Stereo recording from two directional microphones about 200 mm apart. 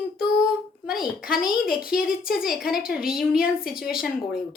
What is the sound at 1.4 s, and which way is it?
Speech, 5° right (ahead or behind).